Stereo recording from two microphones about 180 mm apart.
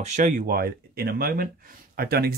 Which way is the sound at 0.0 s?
40° right (ahead or behind).